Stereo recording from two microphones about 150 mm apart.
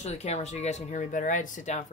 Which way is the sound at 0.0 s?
45° left (ahead or behind).